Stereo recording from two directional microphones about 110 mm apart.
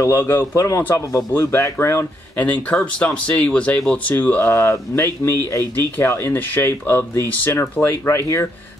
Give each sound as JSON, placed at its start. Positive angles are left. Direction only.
{"t": 0.0, "sound": "speech", "side_deg": 25}
{"t": 2.3, "sound": "speech", "side_deg": 10}